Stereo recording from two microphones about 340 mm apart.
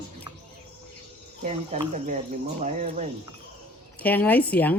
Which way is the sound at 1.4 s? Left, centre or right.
Centre.